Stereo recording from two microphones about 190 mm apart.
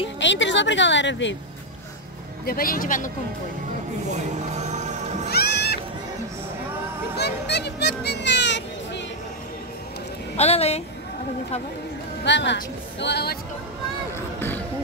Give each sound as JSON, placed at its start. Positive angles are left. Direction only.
{"t": 0.2, "sound": "a woman's voice", "side_deg": 70}
{"t": 2.4, "sound": "speech", "side_deg": 50}
{"t": 4.1, "sound": "music", "side_deg": -40}
{"t": 5.3, "sound": "music", "side_deg": 55}
{"t": 7.2, "sound": "music", "side_deg": 60}
{"t": 10.3, "sound": "a woman's voice", "side_deg": 35}
{"t": 12.3, "sound": "a woman's voice", "side_deg": 65}